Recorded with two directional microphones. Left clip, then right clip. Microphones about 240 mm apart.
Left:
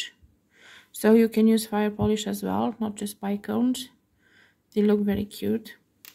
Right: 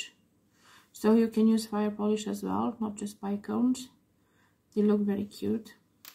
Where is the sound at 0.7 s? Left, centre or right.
Left.